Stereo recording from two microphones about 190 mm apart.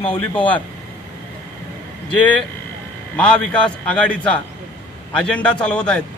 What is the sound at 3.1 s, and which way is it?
A man's voice, 5° left (ahead or behind).